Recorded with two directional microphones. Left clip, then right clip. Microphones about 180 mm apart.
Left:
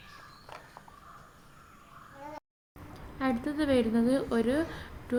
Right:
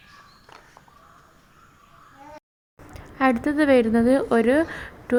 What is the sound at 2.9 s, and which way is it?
A woman's voice, 40° right (ahead or behind).